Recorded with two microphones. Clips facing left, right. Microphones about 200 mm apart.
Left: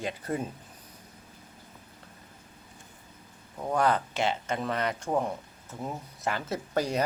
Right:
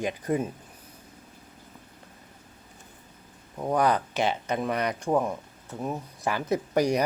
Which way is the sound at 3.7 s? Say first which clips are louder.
Right 2 dB; 15° right (ahead or behind).